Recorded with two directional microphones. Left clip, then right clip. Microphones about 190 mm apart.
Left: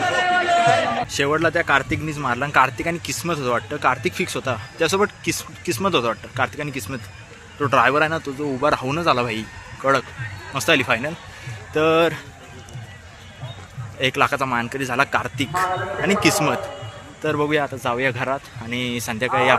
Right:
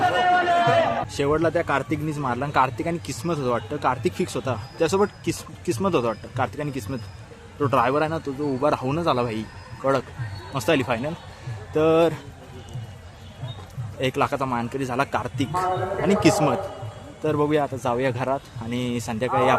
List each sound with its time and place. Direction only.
1.0 s a man's voice: centre (ahead or behind)
14.0 s a man's voice: 5° right (ahead or behind)